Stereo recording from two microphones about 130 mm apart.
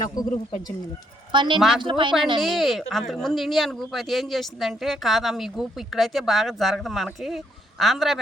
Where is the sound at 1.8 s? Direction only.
40° right (ahead or behind).